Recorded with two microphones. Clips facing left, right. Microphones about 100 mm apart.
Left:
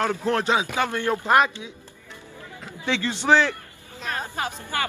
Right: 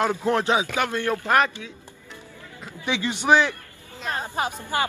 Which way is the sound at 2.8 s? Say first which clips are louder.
Even; 15° right (ahead or behind).